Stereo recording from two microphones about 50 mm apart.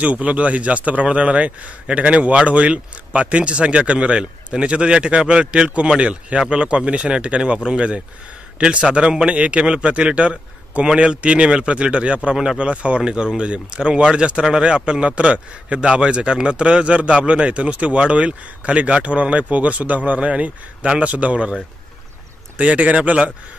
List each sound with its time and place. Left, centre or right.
0.0 s speech: right
22.6 s speech: right